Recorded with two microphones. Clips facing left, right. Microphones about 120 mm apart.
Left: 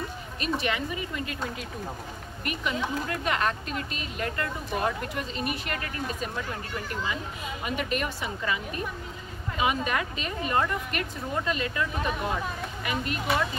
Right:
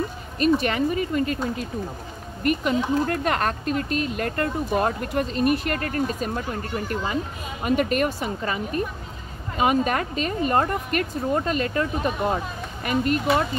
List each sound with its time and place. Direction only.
0.4 s speech: 45° right (ahead or behind)
2.4 s speech: 50° right (ahead or behind)
9.6 s speech: 45° right (ahead or behind)